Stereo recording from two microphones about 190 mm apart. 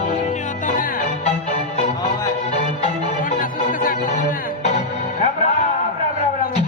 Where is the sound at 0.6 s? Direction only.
45° left (ahead or behind).